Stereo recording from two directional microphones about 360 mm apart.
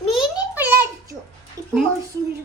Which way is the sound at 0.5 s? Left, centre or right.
Centre.